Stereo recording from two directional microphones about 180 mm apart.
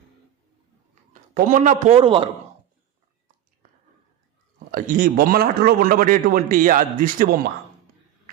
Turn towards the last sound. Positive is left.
turn(degrees=-50)  # may be behind; listen again after turning